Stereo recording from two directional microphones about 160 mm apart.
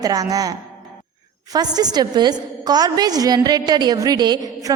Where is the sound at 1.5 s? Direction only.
25° right (ahead or behind).